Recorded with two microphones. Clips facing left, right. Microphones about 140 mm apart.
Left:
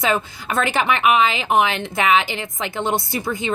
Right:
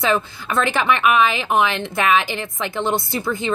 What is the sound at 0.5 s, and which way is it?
Speech, 50° left (ahead or behind).